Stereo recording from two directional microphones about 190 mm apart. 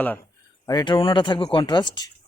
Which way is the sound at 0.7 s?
25° left (ahead or behind).